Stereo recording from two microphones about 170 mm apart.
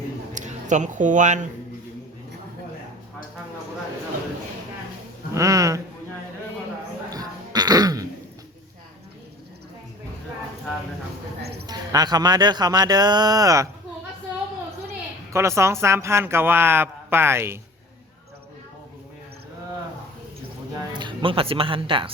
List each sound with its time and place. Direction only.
0.3 s speech: 45° right (ahead or behind)
5.3 s a sound: 20° right (ahead or behind)
7.1 s throat clearing: 20° right (ahead or behind)
11.6 s speech: 20° right (ahead or behind)
15.3 s speech: 15° right (ahead or behind)
20.9 s speech: 25° right (ahead or behind)